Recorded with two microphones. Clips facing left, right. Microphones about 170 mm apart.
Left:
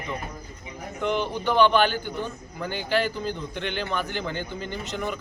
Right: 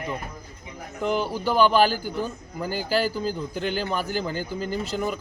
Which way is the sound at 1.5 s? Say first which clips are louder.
Right 1 dB; 35° right (ahead or behind).